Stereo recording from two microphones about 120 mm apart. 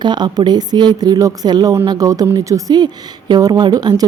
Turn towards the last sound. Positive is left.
turn(degrees=-35)  # may be behind; listen again after turning